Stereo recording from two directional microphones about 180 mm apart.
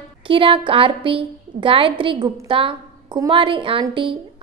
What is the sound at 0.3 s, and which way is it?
A woman's voice, 30° right (ahead or behind).